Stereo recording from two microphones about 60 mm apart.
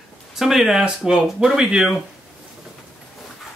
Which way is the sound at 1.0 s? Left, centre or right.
Centre.